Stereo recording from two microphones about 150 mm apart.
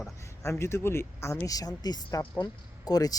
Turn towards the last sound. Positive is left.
turn(degrees=25)  # may be behind; listen again after turning